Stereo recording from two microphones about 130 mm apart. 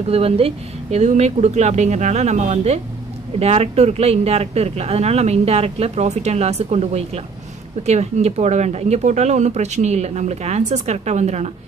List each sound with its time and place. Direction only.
0.1 s speech: 50° right (ahead or behind)